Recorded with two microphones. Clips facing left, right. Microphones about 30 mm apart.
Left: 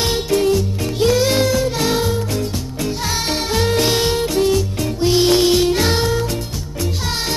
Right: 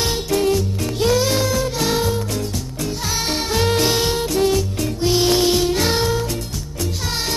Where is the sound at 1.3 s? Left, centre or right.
Left.